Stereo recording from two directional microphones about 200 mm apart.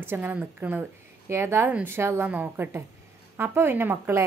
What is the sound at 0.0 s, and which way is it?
A woman's voice, 10° right (ahead or behind).